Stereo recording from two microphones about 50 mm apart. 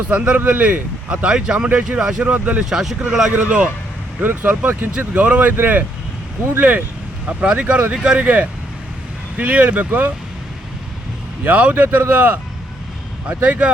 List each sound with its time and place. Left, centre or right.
0.1 s speech: right
2.2 s speech: right
2.6 s speech: centre
3.3 s speech: right
4.2 s speech: right
4.9 s speech: right
9.4 s speech: right
11.4 s speech: right